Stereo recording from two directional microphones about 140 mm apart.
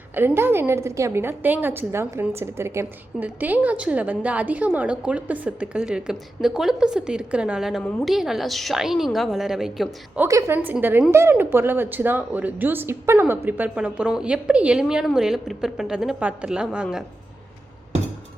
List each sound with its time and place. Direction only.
0.1 s a woman's voice: 15° right (ahead or behind)
10.2 s a woman's voice: 20° right (ahead or behind)